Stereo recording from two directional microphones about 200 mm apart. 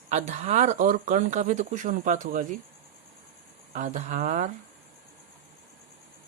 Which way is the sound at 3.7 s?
40° right (ahead or behind).